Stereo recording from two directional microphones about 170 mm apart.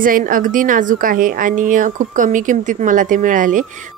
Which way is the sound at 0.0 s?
55° right (ahead or behind).